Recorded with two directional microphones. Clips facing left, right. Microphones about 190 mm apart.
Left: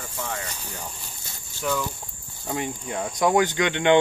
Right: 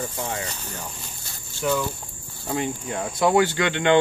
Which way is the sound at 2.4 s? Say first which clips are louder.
Right 3 dB; centre (ahead or behind).